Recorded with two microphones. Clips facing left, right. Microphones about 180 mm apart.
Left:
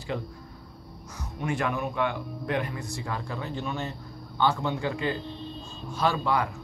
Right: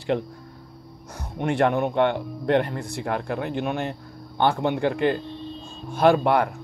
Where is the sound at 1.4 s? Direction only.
65° right (ahead or behind).